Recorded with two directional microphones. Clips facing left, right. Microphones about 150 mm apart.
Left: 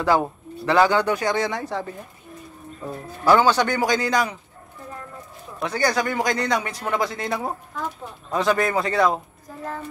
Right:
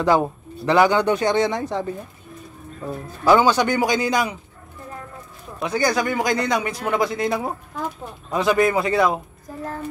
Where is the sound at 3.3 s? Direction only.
15° right (ahead or behind).